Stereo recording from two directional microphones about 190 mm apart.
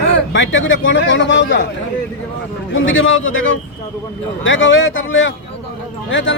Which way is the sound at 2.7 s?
85° left.